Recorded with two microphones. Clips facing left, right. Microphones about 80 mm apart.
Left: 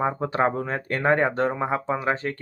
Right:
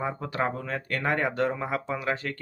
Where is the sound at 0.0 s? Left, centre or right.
Left.